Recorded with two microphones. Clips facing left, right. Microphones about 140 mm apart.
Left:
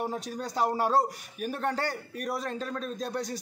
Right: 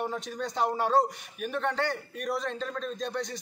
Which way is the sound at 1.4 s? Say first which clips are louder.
Even; 40° left (ahead or behind).